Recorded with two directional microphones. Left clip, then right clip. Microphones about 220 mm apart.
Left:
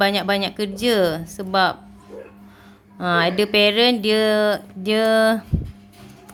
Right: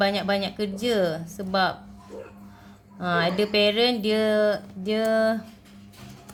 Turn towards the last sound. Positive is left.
turn(degrees=20)  # may be behind; listen again after turning